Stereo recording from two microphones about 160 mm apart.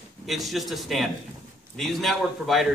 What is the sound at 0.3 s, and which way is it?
A man's voice, centre (ahead or behind).